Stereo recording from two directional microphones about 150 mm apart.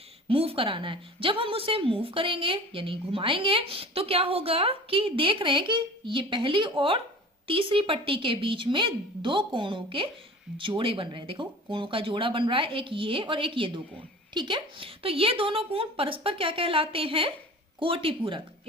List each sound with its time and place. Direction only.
0.3 s a woman's voice: 40° right (ahead or behind)